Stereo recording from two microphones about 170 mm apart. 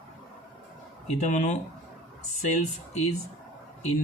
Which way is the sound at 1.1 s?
45° left (ahead or behind).